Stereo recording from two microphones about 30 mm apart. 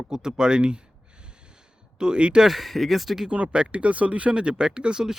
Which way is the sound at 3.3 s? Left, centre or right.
Right.